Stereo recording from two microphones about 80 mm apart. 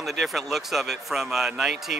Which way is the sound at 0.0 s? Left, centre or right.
Centre.